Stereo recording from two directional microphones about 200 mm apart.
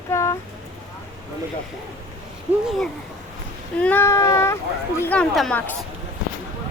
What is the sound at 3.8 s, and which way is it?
Speech, 10° left (ahead or behind).